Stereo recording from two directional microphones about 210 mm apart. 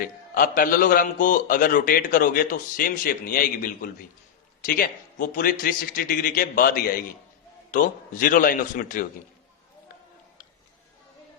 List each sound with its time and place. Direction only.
0.0 s a man's voice: 40° left (ahead or behind)